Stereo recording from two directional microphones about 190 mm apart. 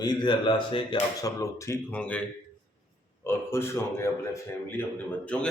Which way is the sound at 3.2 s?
15° left (ahead or behind).